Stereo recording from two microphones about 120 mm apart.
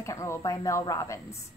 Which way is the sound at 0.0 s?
25° left (ahead or behind).